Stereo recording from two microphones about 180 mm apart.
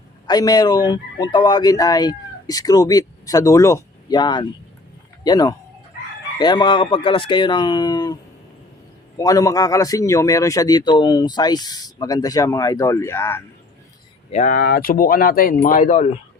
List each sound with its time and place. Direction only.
0.3 s a man's voice: 20° left (ahead or behind)
14.3 s speech: 40° left (ahead or behind)